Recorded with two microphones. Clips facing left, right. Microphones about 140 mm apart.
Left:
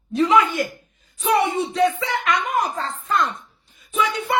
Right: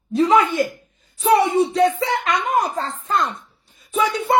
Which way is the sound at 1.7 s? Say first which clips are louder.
Right 2 dB; 35° right (ahead or behind).